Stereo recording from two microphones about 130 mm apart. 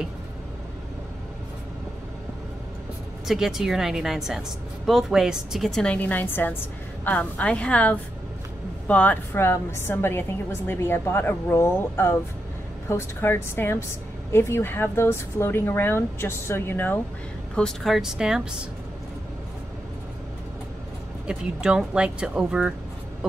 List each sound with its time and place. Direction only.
3.3 s a woman's voice: 5° right (ahead or behind); by 17.0 s 15° left (ahead or behind)
17.6 s a woman's voice: centre (ahead or behind)
21.3 s speech: 5° right (ahead or behind)